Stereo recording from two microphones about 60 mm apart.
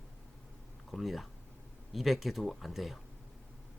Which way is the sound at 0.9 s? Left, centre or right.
Centre.